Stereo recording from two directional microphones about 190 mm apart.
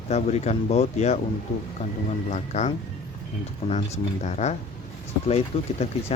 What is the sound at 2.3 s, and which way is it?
Speech, 35° left (ahead or behind).